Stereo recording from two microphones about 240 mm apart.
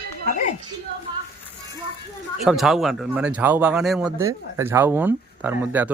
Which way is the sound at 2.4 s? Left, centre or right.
Centre.